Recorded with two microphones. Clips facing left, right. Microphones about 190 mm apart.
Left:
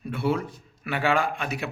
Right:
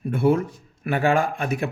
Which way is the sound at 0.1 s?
50° right (ahead or behind).